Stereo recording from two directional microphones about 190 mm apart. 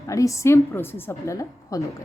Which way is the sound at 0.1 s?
15° left (ahead or behind).